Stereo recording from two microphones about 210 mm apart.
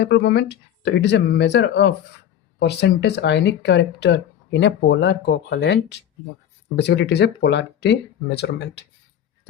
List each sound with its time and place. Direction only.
0.0 s speech: 55° left (ahead or behind)